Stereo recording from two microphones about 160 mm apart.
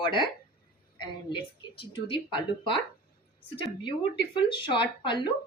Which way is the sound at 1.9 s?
35° left (ahead or behind).